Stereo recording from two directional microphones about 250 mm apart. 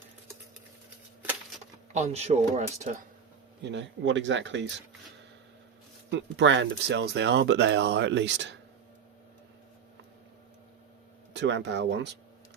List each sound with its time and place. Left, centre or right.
1.9 s speech: right
3.6 s speech: right
6.1 s speech: right
11.3 s speech: right